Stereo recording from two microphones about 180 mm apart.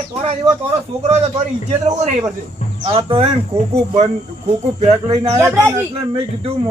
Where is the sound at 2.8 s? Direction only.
30° right (ahead or behind).